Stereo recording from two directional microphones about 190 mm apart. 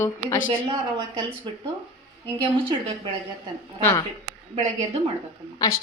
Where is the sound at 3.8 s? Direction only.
20° left (ahead or behind).